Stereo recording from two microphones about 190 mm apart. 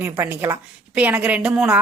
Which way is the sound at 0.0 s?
10° right (ahead or behind).